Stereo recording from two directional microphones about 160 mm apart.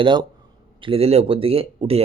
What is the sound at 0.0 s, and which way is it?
Speech, 30° right (ahead or behind).